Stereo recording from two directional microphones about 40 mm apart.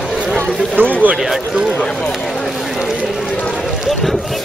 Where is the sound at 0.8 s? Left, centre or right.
Right.